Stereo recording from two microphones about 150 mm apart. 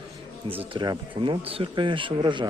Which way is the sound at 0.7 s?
30° right (ahead or behind).